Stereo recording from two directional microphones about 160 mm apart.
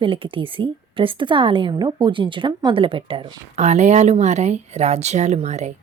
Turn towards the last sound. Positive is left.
turn(degrees=-45)  # may be behind; listen again after turning